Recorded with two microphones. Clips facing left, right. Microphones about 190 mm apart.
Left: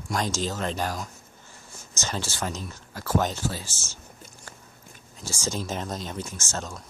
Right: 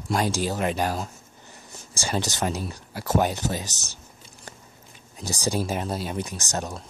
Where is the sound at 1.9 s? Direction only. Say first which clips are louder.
Right 5 dB; 10° right (ahead or behind).